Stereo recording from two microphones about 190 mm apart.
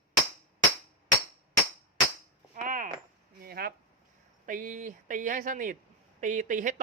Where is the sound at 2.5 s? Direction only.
45° right (ahead or behind).